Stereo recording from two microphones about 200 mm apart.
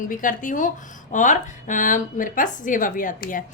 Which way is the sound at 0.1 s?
40° left (ahead or behind).